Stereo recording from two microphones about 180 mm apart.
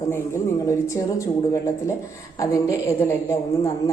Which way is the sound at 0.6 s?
15° left (ahead or behind).